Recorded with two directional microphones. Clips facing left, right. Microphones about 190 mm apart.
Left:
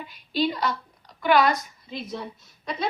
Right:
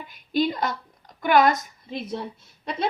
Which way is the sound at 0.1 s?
50° right (ahead or behind).